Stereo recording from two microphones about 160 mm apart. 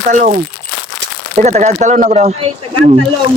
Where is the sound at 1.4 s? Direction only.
45° right (ahead or behind).